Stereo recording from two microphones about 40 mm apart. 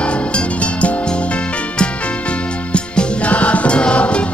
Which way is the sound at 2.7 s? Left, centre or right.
Left.